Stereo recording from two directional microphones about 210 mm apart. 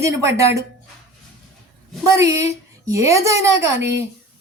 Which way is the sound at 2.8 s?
15° right (ahead or behind).